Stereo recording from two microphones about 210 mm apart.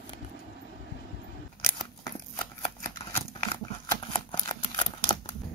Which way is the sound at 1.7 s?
20° left (ahead or behind).